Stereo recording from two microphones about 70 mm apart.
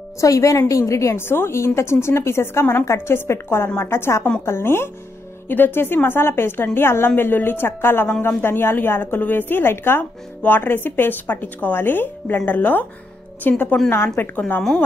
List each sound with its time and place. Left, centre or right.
0.2 s a woman's voice: left